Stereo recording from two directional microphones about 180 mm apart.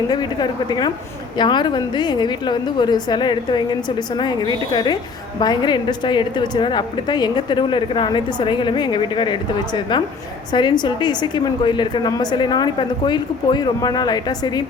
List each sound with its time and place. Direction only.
0.1 s a woman's voice: 25° left (ahead or behind)